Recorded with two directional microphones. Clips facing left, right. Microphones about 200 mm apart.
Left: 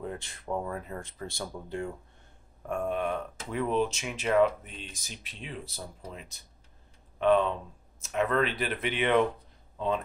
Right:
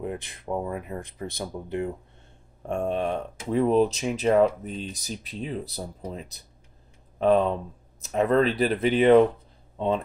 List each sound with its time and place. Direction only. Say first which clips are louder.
0.0 s speech: right 5 dB; 20° right (ahead or behind)
2.6 s speech: right 4 dB; 30° right (ahead or behind)